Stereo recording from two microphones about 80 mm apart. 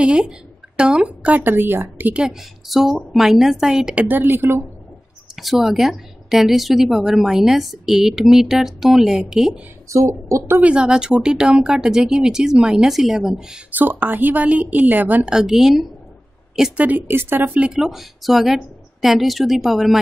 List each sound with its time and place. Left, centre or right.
0.0 s a woman's voice: centre
2.1 s speech: centre; by 4.6 s right
5.3 s speech: centre
9.8 s speech: right
10.6 s speech: centre
13.7 s a woman's voice: right
15.3 s speech: centre
16.7 s a woman's voice: right
17.5 s speech: centre
17.8 s speech: centre